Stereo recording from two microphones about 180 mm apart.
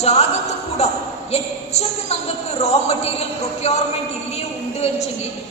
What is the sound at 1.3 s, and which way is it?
A woman's voice, 35° left (ahead or behind).